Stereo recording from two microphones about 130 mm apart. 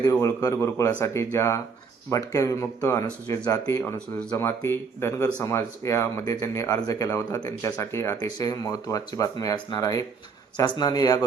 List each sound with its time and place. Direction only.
0.0 s speech: 25° left (ahead or behind)
4.4 s speech: 20° left (ahead or behind)